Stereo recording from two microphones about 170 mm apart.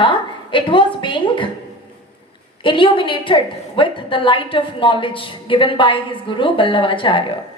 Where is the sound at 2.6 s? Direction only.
30° left (ahead or behind).